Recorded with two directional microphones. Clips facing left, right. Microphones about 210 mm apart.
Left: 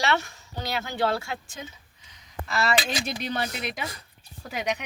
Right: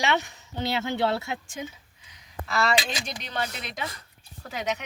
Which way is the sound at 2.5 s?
Centre (ahead or behind).